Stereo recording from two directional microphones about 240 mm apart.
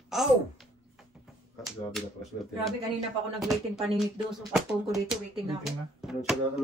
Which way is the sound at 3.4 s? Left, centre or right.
Centre.